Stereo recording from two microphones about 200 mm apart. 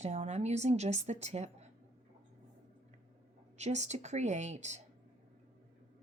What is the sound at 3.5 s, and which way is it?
Speech, 35° right (ahead or behind).